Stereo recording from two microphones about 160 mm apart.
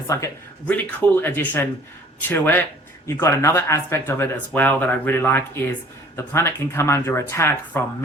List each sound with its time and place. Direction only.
0.1 s speech: 15° left (ahead or behind)